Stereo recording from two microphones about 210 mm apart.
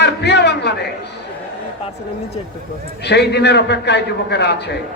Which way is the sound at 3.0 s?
55° left (ahead or behind).